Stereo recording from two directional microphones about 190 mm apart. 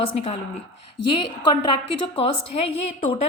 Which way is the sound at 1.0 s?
25° left (ahead or behind).